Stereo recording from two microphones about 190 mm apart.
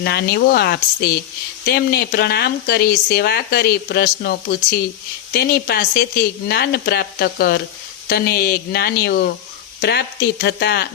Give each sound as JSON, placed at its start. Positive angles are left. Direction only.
{"t": 0.0, "sound": "speech", "side_deg": 60}